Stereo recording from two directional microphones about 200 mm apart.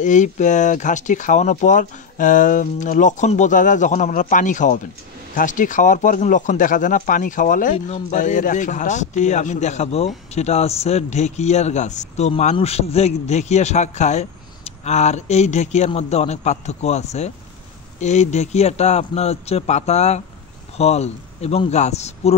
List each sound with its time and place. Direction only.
0.0 s speech: 40° left (ahead or behind)